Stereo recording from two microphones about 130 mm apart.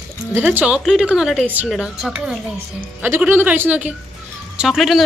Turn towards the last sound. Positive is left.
turn(degrees=0)  # may be behind; listen again after turning